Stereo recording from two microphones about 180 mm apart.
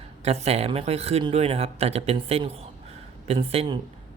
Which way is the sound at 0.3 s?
35° right (ahead or behind).